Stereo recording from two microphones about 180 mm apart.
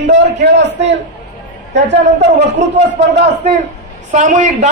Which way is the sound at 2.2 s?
40° right (ahead or behind).